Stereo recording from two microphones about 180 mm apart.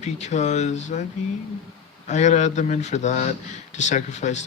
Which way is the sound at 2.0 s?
40° left (ahead or behind).